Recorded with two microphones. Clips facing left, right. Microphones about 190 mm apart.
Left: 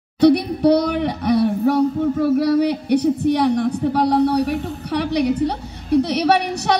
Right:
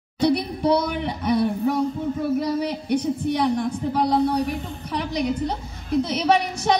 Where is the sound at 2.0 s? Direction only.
65° left (ahead or behind).